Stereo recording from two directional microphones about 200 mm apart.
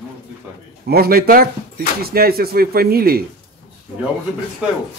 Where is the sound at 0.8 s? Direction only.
50° right (ahead or behind).